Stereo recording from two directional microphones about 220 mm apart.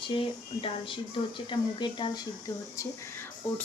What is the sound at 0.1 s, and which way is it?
Speech, 25° left (ahead or behind).